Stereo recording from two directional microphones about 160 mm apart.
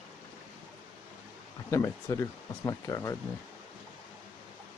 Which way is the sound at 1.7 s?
20° left (ahead or behind).